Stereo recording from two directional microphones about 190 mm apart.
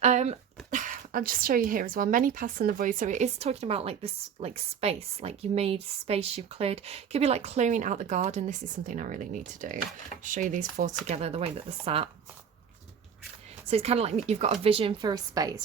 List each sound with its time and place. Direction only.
0.0 s speech: 35° right (ahead or behind)
13.7 s speech: 30° right (ahead or behind)